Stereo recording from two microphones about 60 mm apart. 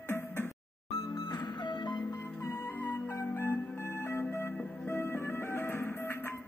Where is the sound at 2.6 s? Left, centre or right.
Left.